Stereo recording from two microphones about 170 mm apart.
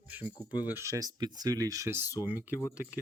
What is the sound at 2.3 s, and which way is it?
Music, 10° right (ahead or behind).